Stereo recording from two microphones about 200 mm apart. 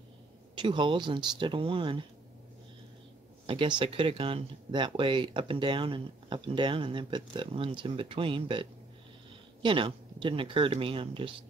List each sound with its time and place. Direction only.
0.6 s speech: 25° right (ahead or behind)
3.4 s speech: 25° right (ahead or behind)